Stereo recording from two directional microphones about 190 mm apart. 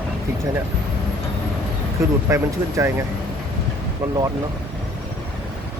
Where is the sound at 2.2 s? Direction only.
15° right (ahead or behind).